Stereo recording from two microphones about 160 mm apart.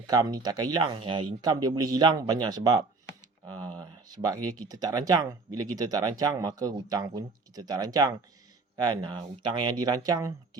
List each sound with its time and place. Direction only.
0.1 s speech: 25° right (ahead or behind)